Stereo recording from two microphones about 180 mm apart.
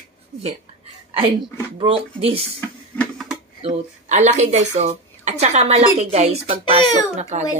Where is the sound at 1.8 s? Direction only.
35° right (ahead or behind).